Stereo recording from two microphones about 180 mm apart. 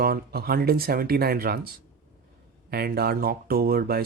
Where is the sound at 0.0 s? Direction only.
60° right (ahead or behind).